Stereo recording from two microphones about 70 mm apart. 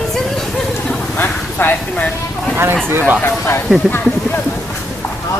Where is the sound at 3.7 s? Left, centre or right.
Centre.